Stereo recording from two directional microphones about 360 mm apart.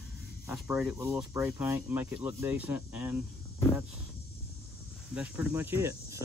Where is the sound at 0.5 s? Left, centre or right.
Centre.